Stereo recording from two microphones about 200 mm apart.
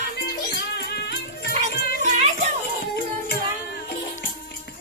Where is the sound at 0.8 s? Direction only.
55° left (ahead or behind).